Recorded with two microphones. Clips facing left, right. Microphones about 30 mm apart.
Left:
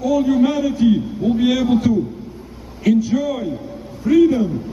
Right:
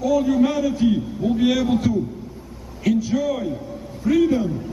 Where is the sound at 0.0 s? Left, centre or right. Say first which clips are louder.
Left 2 dB; centre.